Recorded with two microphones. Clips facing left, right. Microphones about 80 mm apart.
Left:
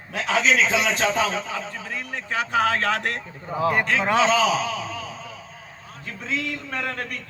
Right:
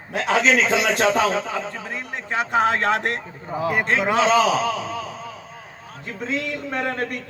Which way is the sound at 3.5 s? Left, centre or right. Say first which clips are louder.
Even; centre.